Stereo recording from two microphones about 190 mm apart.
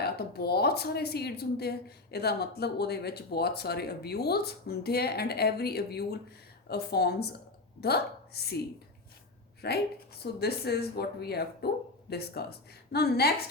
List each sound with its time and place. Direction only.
0.0 s a woman's voice: 55° left (ahead or behind)
9.6 s speech: 55° left (ahead or behind)